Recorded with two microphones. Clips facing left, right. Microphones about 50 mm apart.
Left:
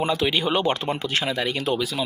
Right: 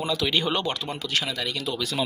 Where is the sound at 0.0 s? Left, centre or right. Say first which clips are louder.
Left 4 dB; left.